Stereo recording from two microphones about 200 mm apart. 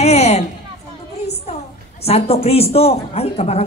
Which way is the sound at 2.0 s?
30° left (ahead or behind).